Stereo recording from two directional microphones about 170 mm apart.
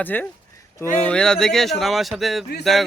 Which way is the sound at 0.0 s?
10° left (ahead or behind).